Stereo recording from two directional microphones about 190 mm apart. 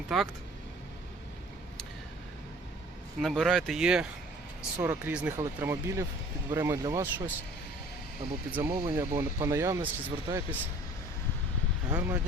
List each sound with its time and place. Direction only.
0.1 s speech: centre (ahead or behind)
3.2 s speech: centre (ahead or behind); by 7.3 s 15° right (ahead or behind)
8.5 s speech: 15° right (ahead or behind)
11.9 s speech: 10° right (ahead or behind)